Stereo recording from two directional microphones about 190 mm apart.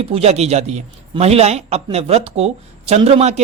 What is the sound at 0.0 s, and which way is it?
Speech, 30° right (ahead or behind).